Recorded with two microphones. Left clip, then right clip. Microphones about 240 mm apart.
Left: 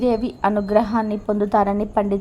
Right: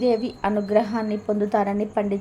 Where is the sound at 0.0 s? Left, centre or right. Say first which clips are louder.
Left 2 dB; centre.